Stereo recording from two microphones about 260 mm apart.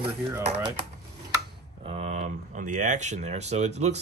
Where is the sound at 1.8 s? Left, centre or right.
Right.